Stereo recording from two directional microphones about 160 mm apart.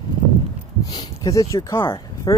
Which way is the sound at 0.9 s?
20° left (ahead or behind).